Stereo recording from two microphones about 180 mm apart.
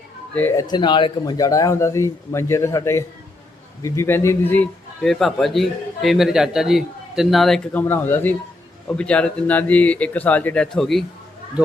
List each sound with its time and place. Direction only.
0.3 s a man's voice: 10° left (ahead or behind)
0.7 s a man's voice: 25° left (ahead or behind); by 11.0 s centre (ahead or behind)